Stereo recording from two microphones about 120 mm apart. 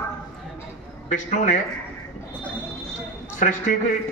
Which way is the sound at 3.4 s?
90° left.